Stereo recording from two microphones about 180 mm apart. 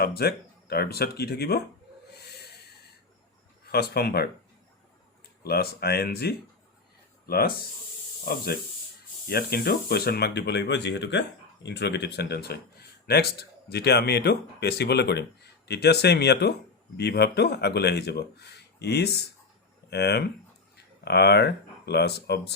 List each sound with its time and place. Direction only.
0.0 s speech: 60° left (ahead or behind)
3.7 s speech: 60° left (ahead or behind)
5.4 s speech: 60° left (ahead or behind)